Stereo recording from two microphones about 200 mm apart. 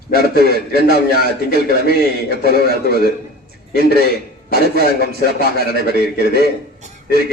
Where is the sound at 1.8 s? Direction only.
50° left (ahead or behind).